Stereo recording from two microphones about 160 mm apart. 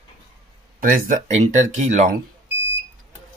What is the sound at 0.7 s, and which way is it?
Speech, 60° right (ahead or behind).